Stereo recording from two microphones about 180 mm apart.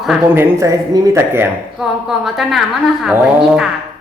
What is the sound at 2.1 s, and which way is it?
A woman's voice, centre (ahead or behind).